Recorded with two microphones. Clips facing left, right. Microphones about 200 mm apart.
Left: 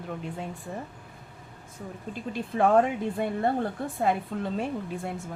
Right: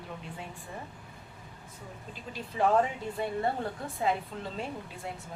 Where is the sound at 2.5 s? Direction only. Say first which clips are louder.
Left 4 dB; 55° left (ahead or behind).